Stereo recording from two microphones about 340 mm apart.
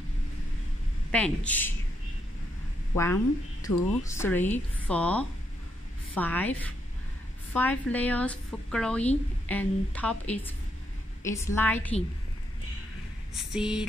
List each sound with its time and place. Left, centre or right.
1.1 s a woman's voice: centre
3.6 s a woman's voice: centre
13.3 s a sound: centre